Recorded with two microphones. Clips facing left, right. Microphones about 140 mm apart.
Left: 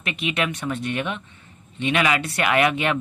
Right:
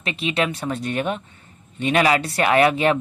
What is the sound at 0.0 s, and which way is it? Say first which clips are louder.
Speech: right 2 dB; 30° right (ahead or behind).